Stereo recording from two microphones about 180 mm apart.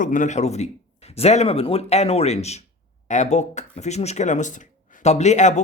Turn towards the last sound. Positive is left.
turn(degrees=40)  # may be behind; listen again after turning